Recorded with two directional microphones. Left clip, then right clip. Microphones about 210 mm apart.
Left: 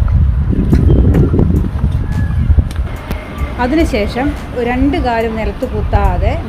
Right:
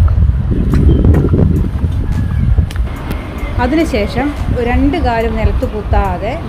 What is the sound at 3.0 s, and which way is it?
A woman's voice, centre (ahead or behind).